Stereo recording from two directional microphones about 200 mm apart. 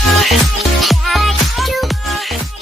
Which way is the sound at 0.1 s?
Centre (ahead or behind).